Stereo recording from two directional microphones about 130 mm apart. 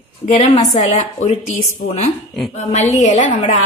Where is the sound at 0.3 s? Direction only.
65° left (ahead or behind).